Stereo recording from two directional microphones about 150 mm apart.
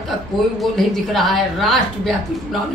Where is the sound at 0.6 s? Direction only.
Centre (ahead or behind).